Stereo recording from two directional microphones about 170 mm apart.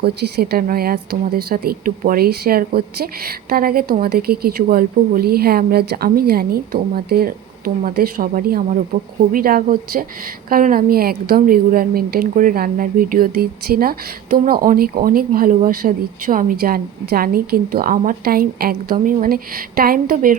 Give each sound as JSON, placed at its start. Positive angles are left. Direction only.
{"t": 0.0, "sound": "a woman's voice", "side_deg": -70}